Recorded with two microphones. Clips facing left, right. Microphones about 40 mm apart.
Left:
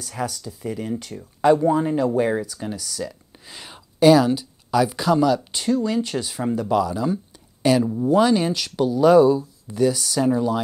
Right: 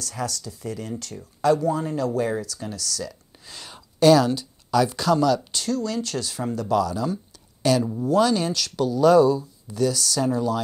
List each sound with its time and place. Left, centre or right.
0.0 s speech: centre